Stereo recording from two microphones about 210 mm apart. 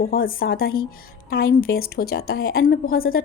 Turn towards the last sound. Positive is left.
turn(degrees=45)  # may be behind; listen again after turning